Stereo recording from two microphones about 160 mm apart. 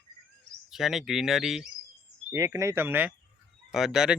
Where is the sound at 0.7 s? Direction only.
Centre (ahead or behind).